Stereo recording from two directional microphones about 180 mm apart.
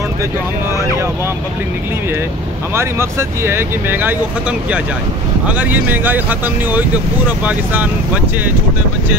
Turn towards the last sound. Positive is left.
turn(degrees=-10)  # may be behind; listen again after turning